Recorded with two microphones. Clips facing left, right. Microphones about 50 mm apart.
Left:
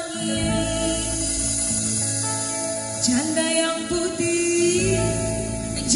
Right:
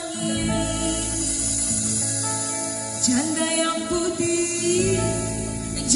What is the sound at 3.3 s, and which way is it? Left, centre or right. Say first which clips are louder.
Music: left 1 dB; left.